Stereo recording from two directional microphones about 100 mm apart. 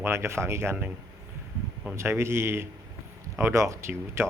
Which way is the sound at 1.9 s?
25° right (ahead or behind).